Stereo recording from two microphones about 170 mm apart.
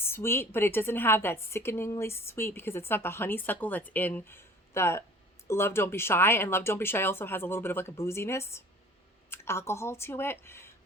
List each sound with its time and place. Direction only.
0.0 s a woman's voice: 15° left (ahead or behind)